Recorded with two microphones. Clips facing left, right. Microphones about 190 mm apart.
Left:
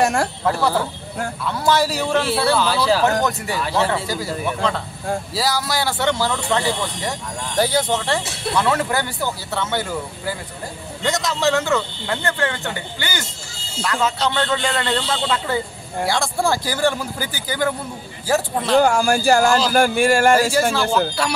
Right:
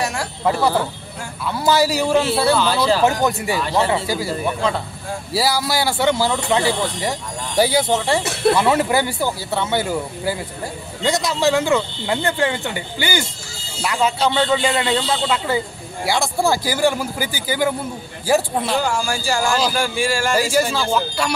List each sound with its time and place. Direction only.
0.0 s speech: 50° left (ahead or behind)
0.5 s speech: 10° right (ahead or behind)
2.5 s speech: 5° left (ahead or behind)
3.0 s speech: 15° right (ahead or behind)
8.2 s speech: 65° right (ahead or behind)
8.5 s speech: 15° right (ahead or behind)
18.8 s speech: 55° left (ahead or behind)
20.7 s speech: centre (ahead or behind)